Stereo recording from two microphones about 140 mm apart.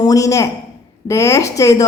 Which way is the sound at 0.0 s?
25° left (ahead or behind).